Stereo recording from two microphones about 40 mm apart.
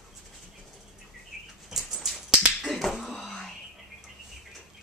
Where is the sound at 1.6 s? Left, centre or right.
Centre.